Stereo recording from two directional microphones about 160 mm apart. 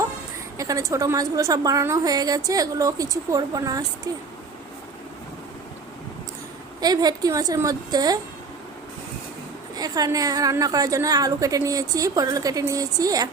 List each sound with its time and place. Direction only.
0.5 s a woman's voice: 20° right (ahead or behind)
6.8 s a woman's voice: 25° right (ahead or behind)
9.7 s a woman's voice: 25° right (ahead or behind)